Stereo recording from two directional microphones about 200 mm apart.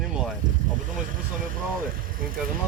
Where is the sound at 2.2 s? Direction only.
45° right (ahead or behind).